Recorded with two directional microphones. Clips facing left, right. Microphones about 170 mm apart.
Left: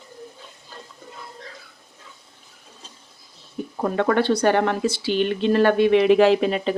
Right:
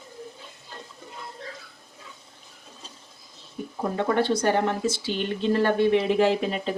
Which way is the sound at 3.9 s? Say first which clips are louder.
Left 4 dB; 75° left (ahead or behind).